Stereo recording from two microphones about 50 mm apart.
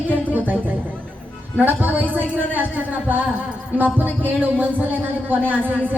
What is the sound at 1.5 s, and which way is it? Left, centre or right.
Speech, right.